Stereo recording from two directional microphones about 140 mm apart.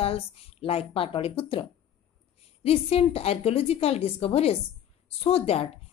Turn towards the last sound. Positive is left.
turn(degrees=45)  # may be behind; listen again after turning